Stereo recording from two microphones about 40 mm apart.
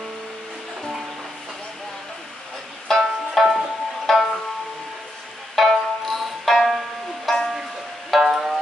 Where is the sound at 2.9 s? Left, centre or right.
Centre.